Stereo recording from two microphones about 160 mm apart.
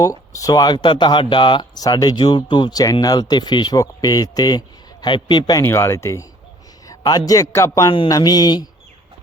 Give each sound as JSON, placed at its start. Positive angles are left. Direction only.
{"t": 0.0, "sound": "speech", "side_deg": 20}
{"t": 6.8, "sound": "a sound", "side_deg": 20}
{"t": 7.3, "sound": "speech", "side_deg": 20}